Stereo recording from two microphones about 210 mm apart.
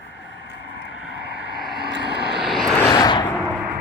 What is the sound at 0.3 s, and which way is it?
Vehicle, 55° left (ahead or behind).